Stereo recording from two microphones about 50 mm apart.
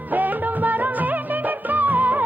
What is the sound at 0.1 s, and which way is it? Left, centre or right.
Music of bollywood, right.